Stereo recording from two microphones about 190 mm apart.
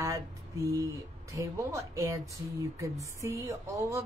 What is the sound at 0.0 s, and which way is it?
Speech, 15° right (ahead or behind).